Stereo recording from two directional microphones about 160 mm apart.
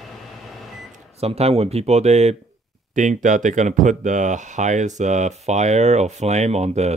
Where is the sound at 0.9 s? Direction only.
40° right (ahead or behind).